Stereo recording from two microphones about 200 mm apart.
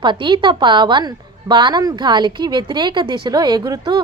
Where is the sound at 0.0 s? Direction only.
25° right (ahead or behind).